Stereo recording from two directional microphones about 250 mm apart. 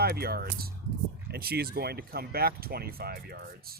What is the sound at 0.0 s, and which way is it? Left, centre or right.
Speech, right.